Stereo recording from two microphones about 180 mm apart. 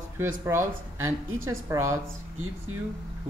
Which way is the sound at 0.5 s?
15° right (ahead or behind).